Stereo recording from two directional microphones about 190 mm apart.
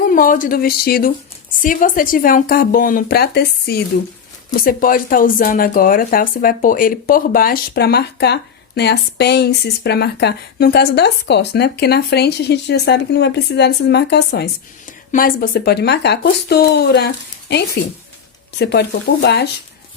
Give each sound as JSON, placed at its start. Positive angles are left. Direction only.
{"t": 0.0, "sound": "speech", "side_deg": 45}
{"t": 15.1, "sound": "speech", "side_deg": 50}